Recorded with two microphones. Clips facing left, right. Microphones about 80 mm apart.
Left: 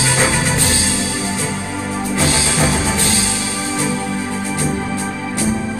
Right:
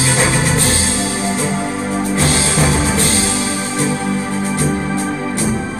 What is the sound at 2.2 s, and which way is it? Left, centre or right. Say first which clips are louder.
Music: left 1 dB; right.